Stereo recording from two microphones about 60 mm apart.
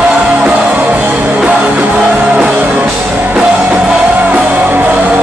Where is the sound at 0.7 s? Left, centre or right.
Right.